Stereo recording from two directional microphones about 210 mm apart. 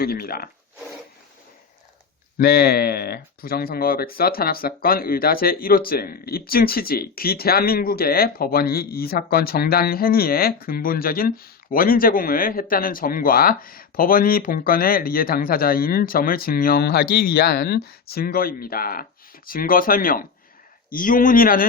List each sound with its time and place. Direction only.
0.0 s speech: 45° left (ahead or behind)
2.4 s speech: 50° left (ahead or behind)